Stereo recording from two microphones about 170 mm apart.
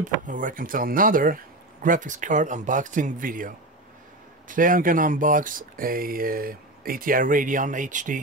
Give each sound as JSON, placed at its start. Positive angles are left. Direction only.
{"t": 0.0, "sound": "speech", "side_deg": -50}